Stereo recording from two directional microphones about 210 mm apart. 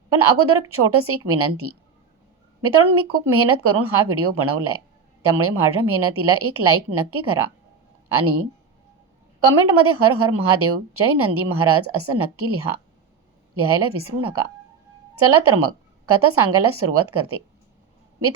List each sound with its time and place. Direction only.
0.1 s a woman's voice: 90° right